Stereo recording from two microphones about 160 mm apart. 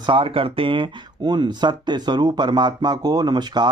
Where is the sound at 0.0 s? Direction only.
30° right (ahead or behind).